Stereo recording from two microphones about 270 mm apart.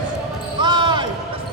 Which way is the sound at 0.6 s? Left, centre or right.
Centre.